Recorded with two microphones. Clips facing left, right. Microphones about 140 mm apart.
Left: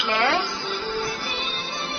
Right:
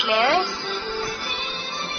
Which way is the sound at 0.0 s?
5° right (ahead or behind).